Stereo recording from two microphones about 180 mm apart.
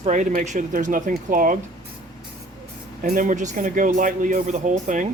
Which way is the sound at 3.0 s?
45° right (ahead or behind).